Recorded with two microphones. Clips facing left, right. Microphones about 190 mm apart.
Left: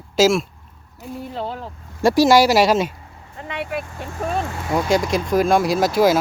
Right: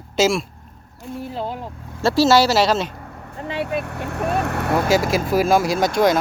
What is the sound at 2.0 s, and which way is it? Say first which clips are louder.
Speech: left 2 dB; 15° left (ahead or behind).